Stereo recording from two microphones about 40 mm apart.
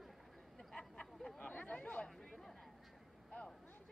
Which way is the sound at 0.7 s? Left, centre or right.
Centre.